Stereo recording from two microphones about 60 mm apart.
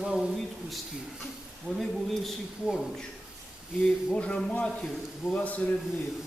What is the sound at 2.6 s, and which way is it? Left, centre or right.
Speech, centre.